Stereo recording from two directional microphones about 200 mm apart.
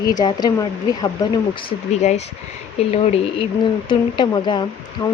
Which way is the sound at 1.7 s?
35° left (ahead or behind).